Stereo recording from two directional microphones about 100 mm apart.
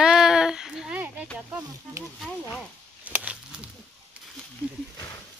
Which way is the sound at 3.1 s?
15° right (ahead or behind).